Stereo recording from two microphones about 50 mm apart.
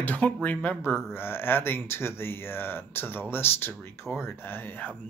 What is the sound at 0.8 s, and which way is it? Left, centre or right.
Speech, left.